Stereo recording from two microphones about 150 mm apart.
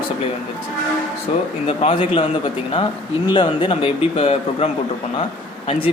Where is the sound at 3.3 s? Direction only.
35° left (ahead or behind).